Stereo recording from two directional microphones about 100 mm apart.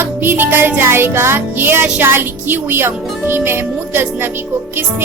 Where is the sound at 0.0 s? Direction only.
20° right (ahead or behind).